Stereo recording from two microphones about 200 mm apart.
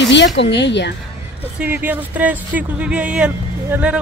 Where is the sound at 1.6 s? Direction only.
10° right (ahead or behind).